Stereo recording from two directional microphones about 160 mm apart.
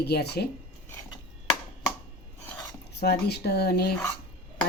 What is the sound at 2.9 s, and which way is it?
Speech, 90° left.